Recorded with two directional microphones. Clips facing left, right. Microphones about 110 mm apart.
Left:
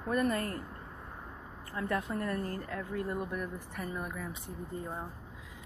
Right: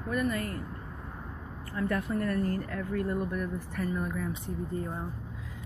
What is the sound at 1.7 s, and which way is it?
Speech, 20° left (ahead or behind).